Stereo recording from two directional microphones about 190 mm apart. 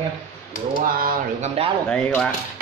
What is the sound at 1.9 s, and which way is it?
Speech, 5° left (ahead or behind).